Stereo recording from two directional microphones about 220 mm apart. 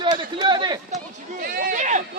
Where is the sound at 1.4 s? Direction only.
40° right (ahead or behind).